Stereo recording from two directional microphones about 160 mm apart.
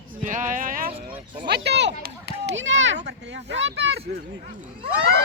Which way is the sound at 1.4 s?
90° right.